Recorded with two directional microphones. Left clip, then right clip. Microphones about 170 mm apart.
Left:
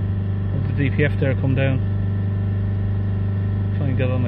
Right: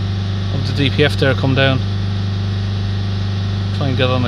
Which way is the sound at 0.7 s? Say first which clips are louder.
Right 7 dB; 55° right (ahead or behind).